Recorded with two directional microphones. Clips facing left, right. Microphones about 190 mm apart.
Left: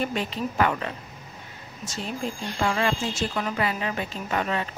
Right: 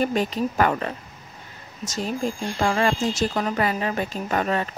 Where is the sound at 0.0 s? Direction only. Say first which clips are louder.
Right 5 dB; 45° right (ahead or behind).